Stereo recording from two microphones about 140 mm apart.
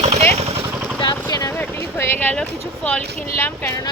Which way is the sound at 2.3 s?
5° left (ahead or behind).